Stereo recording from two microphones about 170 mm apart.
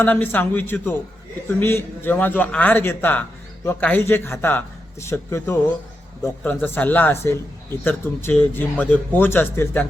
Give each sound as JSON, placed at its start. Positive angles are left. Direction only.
{"t": 0.0, "sound": "a man's voice", "side_deg": 10}